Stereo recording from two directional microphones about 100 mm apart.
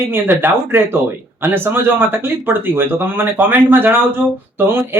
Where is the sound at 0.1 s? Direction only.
20° right (ahead or behind).